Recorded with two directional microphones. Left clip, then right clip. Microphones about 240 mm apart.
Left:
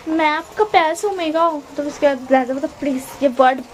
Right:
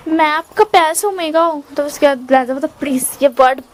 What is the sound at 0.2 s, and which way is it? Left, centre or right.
A woman's voice, right.